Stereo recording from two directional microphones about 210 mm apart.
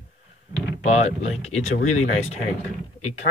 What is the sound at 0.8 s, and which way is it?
Speech, 30° left (ahead or behind).